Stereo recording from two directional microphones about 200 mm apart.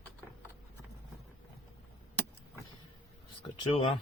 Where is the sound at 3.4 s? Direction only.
25° left (ahead or behind).